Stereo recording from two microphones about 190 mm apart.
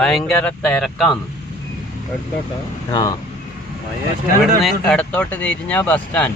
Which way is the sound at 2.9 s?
20° left (ahead or behind).